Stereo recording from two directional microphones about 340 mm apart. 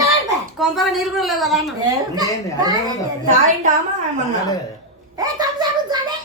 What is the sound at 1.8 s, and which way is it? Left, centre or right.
A woman's voice, centre.